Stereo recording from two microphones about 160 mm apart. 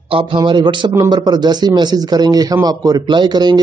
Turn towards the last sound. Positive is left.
turn(degrees=-25)  # may be behind; listen again after turning